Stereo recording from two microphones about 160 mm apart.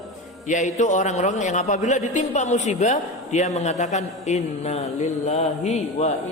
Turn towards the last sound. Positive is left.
turn(degrees=45)  # may be behind; listen again after turning